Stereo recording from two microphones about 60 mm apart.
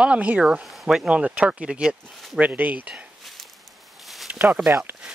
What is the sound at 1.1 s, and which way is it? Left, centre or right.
Speech, right.